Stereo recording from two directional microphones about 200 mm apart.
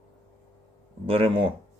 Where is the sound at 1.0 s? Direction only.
30° right (ahead or behind).